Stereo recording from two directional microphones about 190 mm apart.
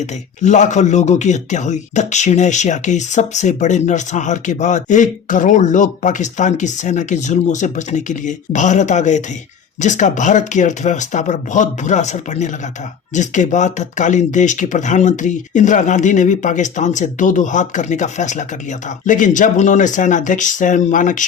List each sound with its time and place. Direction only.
0.0 s speech: 40° left (ahead or behind)